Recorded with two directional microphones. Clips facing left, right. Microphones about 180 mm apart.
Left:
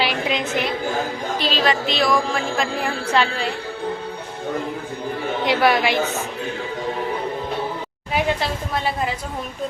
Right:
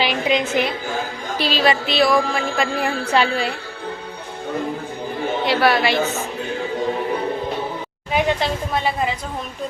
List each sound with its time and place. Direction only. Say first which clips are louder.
0.0 s a woman's voice: right 3 dB; centre (ahead or behind)
5.5 s a woman's voice: even; 15° left (ahead or behind)
8.1 s a woman's voice: right 2 dB; 5° left (ahead or behind)